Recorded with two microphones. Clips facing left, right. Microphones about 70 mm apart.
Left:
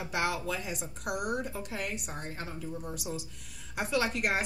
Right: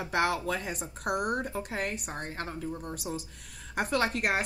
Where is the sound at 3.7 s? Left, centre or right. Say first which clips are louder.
Right 2 dB; right.